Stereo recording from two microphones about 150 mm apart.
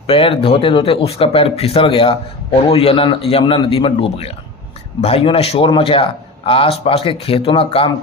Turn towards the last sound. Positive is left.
turn(degrees=40)  # may be behind; listen again after turning